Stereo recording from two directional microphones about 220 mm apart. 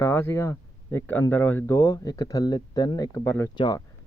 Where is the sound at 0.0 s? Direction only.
10° left (ahead or behind).